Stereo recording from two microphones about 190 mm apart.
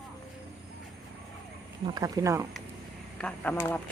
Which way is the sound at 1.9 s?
20° right (ahead or behind).